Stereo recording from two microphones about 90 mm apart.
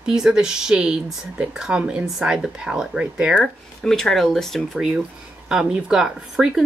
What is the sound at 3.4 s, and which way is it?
Speech, 5° left (ahead or behind).